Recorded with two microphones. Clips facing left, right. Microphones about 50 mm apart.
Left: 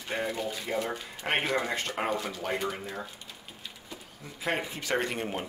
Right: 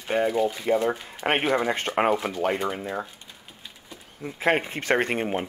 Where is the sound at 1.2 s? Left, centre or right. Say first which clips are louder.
Right 6 dB; right.